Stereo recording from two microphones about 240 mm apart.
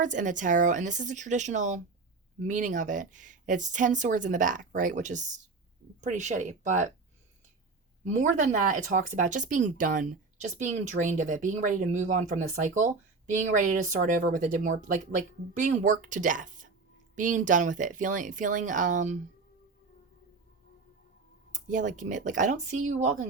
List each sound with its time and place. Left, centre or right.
0.0 s speech: right
8.0 s speech: right
21.5 s speech: right